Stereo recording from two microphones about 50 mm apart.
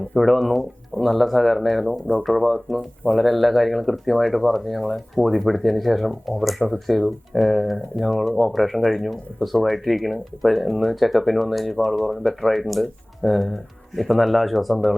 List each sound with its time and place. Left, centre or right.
0.2 s speech: centre
1.9 s speech: left
2.2 s speech: centre
2.7 s speech: left
3.2 s speech: centre